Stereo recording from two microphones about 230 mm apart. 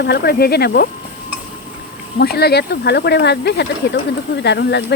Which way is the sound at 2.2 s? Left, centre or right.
Left.